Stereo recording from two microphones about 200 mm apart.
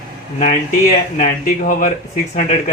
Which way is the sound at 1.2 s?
40° left (ahead or behind).